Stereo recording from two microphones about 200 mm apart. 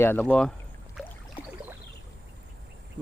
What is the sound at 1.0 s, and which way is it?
Boat, centre (ahead or behind).